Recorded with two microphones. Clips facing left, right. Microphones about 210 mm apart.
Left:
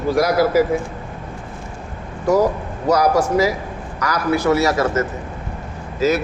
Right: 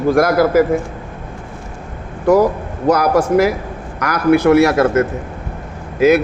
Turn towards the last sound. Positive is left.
turn(degrees=-55)  # may be behind; listen again after turning